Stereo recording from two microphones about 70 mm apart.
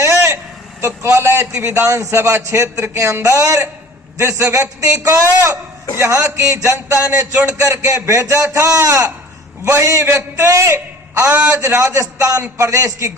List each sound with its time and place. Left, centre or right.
0.0 s vehicle: right
0.8 s a man's voice: right